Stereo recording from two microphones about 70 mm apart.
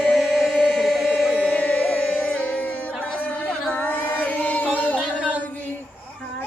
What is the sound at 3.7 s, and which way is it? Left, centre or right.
Chant, left.